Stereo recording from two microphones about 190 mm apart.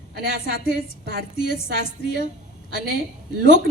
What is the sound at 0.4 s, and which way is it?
A woman's voice, 55° left (ahead or behind).